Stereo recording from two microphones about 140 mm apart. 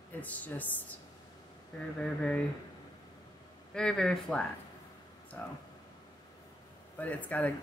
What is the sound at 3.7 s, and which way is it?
Speech, 5° left (ahead or behind).